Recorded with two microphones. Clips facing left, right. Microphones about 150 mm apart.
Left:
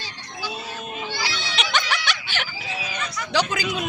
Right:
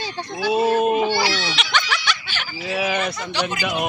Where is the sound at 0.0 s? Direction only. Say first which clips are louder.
Right 10 dB; 60° right (ahead or behind); by 1.5 s 75° right (ahead or behind).